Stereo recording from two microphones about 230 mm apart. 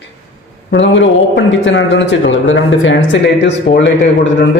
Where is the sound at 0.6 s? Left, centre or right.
Left.